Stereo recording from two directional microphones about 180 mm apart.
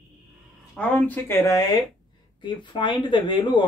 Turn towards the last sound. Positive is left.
turn(degrees=25)  # may be behind; listen again after turning